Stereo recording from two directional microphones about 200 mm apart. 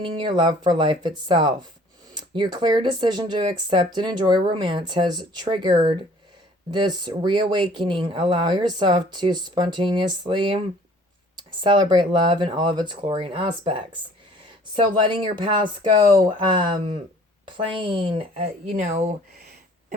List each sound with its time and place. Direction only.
0.2 s speech: 20° right (ahead or behind)
11.6 s speech: 20° right (ahead or behind)
15.0 s speech: 25° right (ahead or behind)
17.7 s speech: 25° right (ahead or behind)